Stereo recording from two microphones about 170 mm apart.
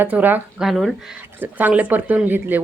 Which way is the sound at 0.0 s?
10° right (ahead or behind).